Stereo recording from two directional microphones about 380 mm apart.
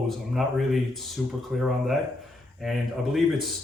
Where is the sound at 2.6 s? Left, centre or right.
Centre.